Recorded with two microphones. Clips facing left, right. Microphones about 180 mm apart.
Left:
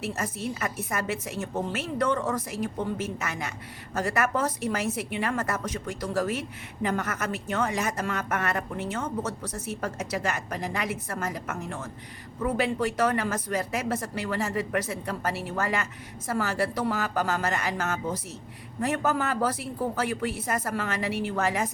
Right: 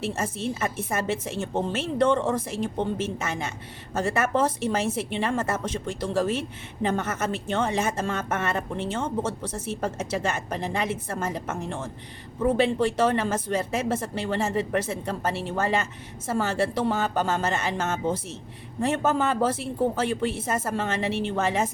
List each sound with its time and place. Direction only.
0.0 s speech: 25° right (ahead or behind)